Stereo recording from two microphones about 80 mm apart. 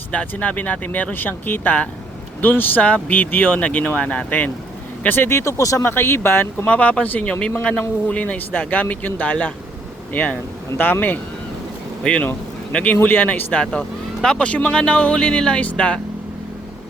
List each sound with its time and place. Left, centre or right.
0.1 s speech: centre
6.7 s speech: centre
12.0 s speech: centre
13.7 s speech: centre